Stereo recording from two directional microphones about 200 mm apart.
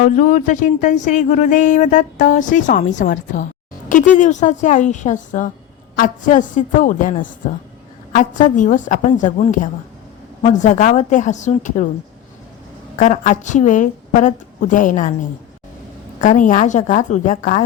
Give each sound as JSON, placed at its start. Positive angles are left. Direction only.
{"t": 0.0, "sound": "music", "side_deg": 40}
{"t": 13.0, "sound": "music", "side_deg": 40}
{"t": 16.2, "sound": "music", "side_deg": 40}